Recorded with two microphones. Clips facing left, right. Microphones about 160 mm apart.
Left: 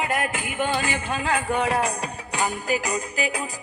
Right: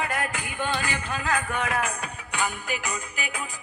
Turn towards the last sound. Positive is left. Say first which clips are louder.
# left 7 dB
turn(degrees=35)  # may be behind; listen again after turning